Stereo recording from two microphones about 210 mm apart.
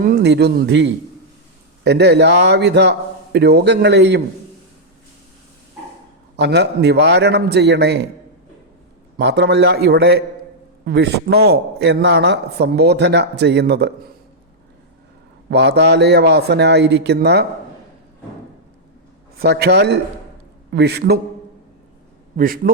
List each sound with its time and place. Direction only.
0.0 s a man's voice: 50° right (ahead or behind)
6.3 s a man's voice: 55° right (ahead or behind)
9.1 s a man's voice: 55° right (ahead or behind)
15.4 s a man's voice: 55° right (ahead or behind)
19.4 s a man's voice: 50° right (ahead or behind)
22.4 s a man's voice: 40° right (ahead or behind)